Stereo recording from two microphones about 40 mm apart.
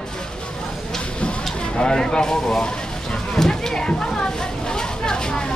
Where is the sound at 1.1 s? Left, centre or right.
Left.